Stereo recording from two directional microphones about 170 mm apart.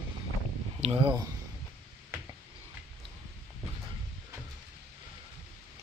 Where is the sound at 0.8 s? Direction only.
35° right (ahead or behind).